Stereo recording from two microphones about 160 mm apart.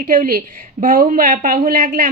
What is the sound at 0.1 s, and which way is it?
A woman's voice, 60° right (ahead or behind).